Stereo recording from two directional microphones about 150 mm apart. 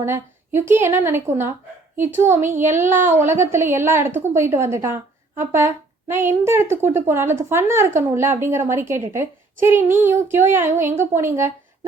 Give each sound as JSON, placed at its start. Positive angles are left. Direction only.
{"t": 0.0, "sound": "speech", "side_deg": -15}